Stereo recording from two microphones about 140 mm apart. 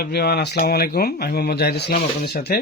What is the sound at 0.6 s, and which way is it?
Speech, 90° left.